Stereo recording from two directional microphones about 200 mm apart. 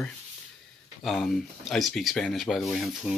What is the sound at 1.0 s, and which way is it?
Speech, centre (ahead or behind).